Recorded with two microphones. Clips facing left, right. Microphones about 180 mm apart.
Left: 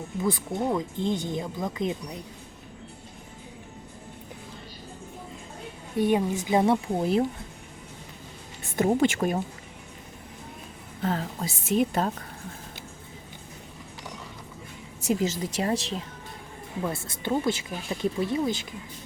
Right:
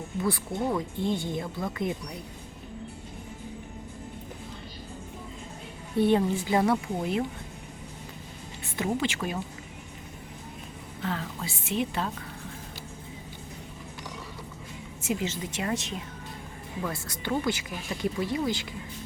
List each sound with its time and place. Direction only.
0.2 s speech: 20° left (ahead or behind)
6.0 s a woman's voice: 15° left (ahead or behind)
7.0 s a woman's voice: 35° left (ahead or behind)
8.7 s speech: 45° left (ahead or behind)
11.0 s a woman's voice: 40° left (ahead or behind)
15.0 s a woman's voice: 40° left (ahead or behind); by 18.7 s 20° left (ahead or behind)